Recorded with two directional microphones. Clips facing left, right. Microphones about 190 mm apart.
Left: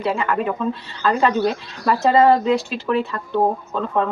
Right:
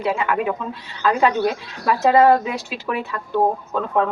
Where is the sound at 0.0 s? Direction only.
10° right (ahead or behind).